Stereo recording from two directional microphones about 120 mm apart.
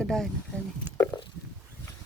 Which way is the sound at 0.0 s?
5° left (ahead or behind).